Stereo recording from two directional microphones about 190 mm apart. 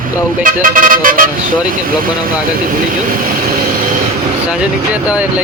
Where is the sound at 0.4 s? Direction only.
45° right (ahead or behind).